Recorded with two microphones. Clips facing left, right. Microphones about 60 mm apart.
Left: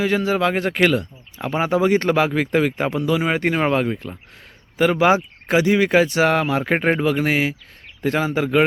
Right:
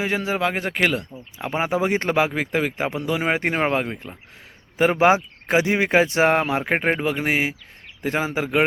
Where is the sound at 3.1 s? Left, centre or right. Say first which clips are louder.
Left 2 dB; right.